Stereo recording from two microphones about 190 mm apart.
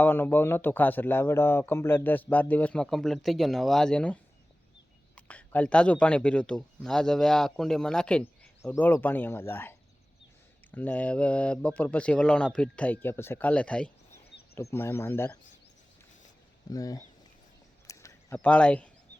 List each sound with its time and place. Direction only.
0.0 s a man's voice: 10° left (ahead or behind)
16.6 s speech: 20° left (ahead or behind)
17.8 s a sound: 15° left (ahead or behind)
18.3 s speech: 5° left (ahead or behind)